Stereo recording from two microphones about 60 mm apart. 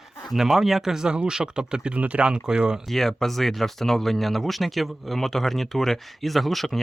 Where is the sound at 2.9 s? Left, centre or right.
Centre.